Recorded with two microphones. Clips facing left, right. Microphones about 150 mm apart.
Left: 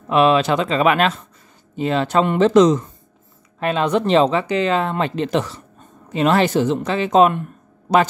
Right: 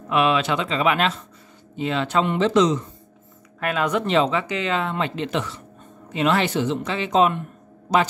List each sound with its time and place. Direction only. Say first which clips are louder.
0.1 s speech: left 5 dB; 35° left (ahead or behind)
3.5 s speech: left 4 dB; 25° left (ahead or behind); by 8.0 s 60° left (ahead or behind)